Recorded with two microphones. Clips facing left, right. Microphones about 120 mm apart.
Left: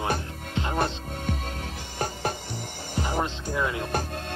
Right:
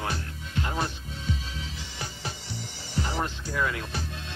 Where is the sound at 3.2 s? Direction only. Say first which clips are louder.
Left 2 dB; 20° left (ahead or behind).